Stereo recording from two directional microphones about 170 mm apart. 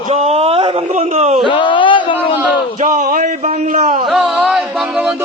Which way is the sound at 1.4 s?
30° left (ahead or behind).